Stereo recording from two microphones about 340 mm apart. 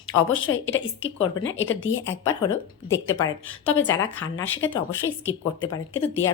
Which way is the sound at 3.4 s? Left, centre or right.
Left.